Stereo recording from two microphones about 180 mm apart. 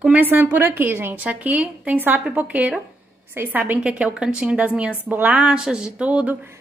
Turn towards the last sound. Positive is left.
turn(degrees=-10)  # may be behind; listen again after turning